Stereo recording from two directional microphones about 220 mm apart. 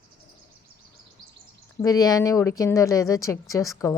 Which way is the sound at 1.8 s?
15° left (ahead or behind).